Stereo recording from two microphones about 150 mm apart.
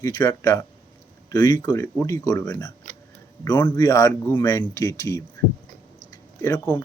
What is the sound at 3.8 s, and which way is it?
Speech, 20° left (ahead or behind).